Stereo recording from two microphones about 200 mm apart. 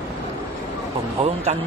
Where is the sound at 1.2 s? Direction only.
35° right (ahead or behind).